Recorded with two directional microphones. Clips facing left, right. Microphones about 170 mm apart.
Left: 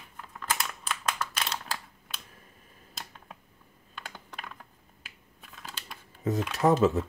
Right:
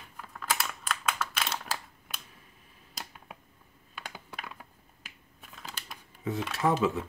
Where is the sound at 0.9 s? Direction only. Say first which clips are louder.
Even; 5° right (ahead or behind).